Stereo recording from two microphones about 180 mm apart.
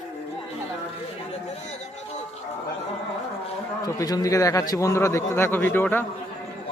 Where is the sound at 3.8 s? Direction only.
20° left (ahead or behind).